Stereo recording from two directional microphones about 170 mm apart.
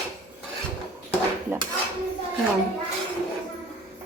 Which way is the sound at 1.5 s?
15° right (ahead or behind).